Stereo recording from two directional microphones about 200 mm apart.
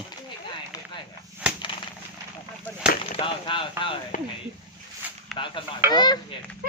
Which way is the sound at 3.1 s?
25° left (ahead or behind).